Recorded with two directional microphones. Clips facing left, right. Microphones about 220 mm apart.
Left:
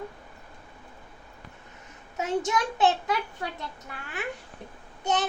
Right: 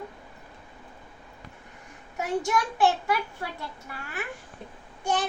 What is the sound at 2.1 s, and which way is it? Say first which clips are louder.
A child's voice: even; 20° left (ahead or behind).